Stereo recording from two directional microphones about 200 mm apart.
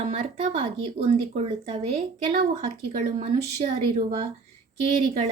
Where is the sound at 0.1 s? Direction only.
35° right (ahead or behind).